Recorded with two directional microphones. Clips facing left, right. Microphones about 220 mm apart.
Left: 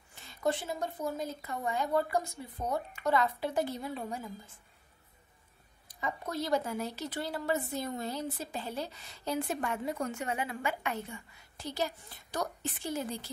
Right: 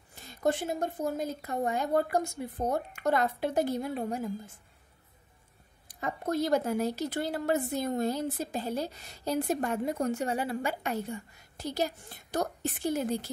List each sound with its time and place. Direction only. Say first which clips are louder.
0.1 s a woman's voice: right 3 dB; 40° right (ahead or behind)
2.2 s speech: right 7 dB; 75° right (ahead or behind)
2.7 s a woman's voice: even; 45° right (ahead or behind)
5.9 s a woman's voice: right 5 dB; 50° right (ahead or behind)